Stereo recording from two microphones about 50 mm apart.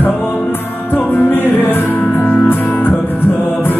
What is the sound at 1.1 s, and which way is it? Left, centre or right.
Music, left.